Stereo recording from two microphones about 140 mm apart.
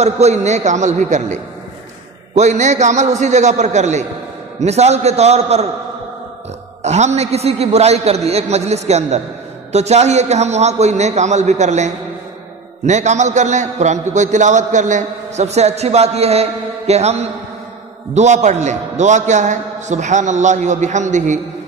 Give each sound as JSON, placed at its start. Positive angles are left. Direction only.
{"t": 0.0, "sound": "a man's voice", "side_deg": -55}
{"t": 6.8, "sound": "a man's voice", "side_deg": -55}